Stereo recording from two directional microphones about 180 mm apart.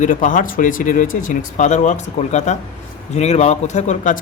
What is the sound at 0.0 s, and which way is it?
Speech, 45° left (ahead or behind).